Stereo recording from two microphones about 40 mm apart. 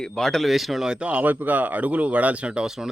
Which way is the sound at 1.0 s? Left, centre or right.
Right.